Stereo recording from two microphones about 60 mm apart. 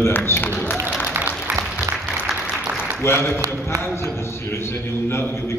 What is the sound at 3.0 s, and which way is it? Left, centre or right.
Speech, left.